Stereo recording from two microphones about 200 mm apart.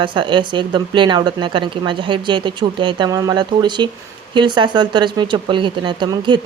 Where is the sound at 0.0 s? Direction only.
25° right (ahead or behind).